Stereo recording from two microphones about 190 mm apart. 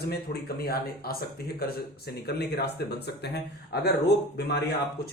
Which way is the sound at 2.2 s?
60° left (ahead or behind).